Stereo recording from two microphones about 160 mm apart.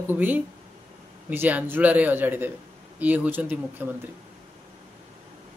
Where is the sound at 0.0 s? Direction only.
10° right (ahead or behind).